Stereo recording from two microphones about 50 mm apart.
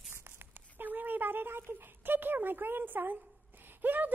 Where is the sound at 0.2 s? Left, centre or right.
Right.